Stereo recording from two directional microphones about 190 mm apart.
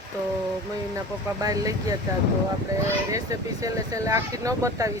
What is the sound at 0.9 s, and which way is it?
Speech, 20° right (ahead or behind).